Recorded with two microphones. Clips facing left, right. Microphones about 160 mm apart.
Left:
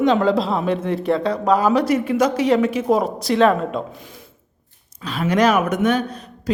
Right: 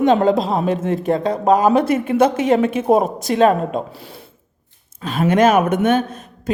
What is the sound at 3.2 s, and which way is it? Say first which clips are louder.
Speech: right 1 dB; 20° right (ahead or behind).